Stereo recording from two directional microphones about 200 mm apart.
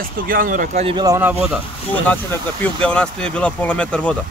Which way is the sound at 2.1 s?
10° left (ahead or behind).